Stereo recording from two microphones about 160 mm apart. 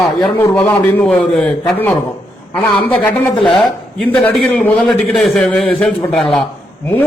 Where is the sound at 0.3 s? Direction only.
10° left (ahead or behind).